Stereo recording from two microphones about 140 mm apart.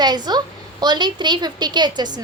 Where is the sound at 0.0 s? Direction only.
30° right (ahead or behind).